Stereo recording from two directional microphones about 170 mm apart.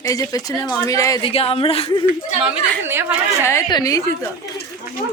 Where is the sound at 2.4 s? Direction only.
10° right (ahead or behind).